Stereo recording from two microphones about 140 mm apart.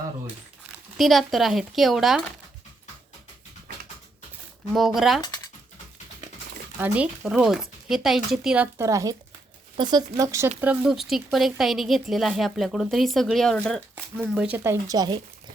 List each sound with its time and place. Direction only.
0.9 s speech: centre (ahead or behind)
4.7 s speech: centre (ahead or behind)
6.7 s speech: 10° right (ahead or behind)
10.6 s speech: 10° right (ahead or behind)
10.9 s speech: centre (ahead or behind)
14.3 s speech: 10° right (ahead or behind); by 15.2 s 30° right (ahead or behind)